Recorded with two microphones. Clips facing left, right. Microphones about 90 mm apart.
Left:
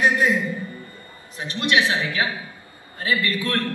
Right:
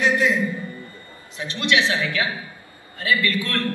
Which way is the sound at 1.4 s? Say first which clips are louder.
Even; 30° left (ahead or behind).